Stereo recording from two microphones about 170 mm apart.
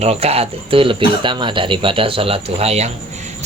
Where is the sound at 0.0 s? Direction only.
35° right (ahead or behind).